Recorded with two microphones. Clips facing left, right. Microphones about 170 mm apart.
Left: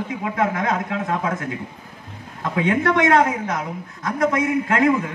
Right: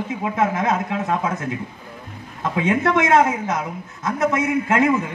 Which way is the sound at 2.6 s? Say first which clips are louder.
Left 1 dB; 20° right (ahead or behind).